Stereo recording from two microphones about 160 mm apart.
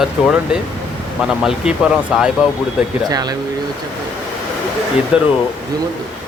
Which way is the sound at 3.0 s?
25° right (ahead or behind).